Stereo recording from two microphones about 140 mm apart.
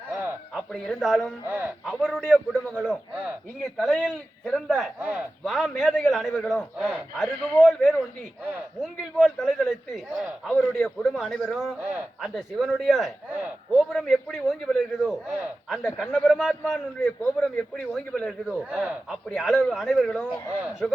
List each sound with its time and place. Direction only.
0.5 s speech: centre (ahead or behind)
1.5 s speech: 15° right (ahead or behind)
1.8 s a man's voice: centre (ahead or behind)
11.8 s speech: 10° right (ahead or behind)
12.3 s a man's voice: centre (ahead or behind)
18.7 s speech: 10° right (ahead or behind)
19.3 s a man's voice: centre (ahead or behind)